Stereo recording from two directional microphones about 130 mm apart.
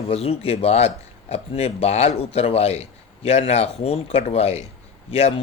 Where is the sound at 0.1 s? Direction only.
50° left (ahead or behind).